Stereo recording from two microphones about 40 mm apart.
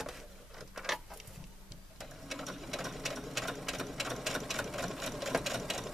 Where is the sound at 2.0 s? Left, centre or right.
Centre.